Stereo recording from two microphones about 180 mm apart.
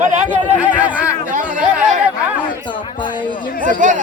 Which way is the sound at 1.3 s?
45° right (ahead or behind).